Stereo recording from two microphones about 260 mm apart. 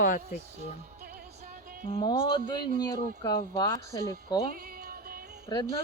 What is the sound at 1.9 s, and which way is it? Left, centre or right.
Speech, centre.